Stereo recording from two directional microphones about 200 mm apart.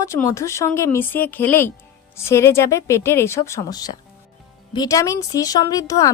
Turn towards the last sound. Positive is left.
turn(degrees=15)  # may be behind; listen again after turning